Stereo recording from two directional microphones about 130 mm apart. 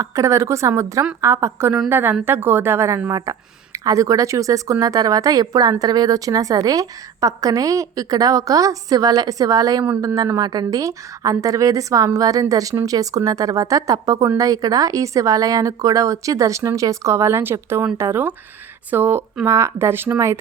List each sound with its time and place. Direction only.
0.0 s a woman's voice: 25° right (ahead or behind)